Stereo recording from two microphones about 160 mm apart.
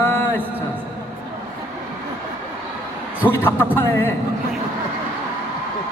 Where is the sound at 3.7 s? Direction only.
15° left (ahead or behind).